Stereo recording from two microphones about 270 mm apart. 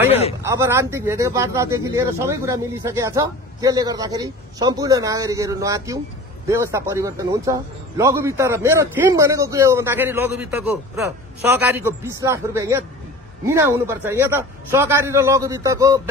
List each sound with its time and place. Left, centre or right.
0.5 s a man's voice: centre